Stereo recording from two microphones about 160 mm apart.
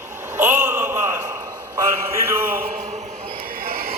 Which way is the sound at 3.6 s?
70° right (ahead or behind).